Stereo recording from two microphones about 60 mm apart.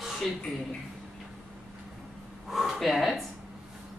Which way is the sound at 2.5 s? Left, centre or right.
Centre.